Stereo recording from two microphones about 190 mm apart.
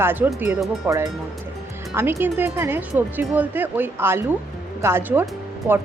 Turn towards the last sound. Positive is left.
turn(degrees=-10)  # may be behind; listen again after turning